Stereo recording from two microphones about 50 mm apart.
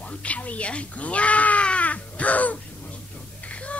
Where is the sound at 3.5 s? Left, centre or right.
Left.